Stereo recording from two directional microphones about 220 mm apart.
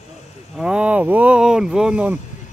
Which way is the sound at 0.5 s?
5° right (ahead or behind).